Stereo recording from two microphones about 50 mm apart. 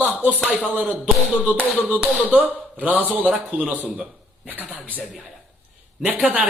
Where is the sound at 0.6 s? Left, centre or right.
Right.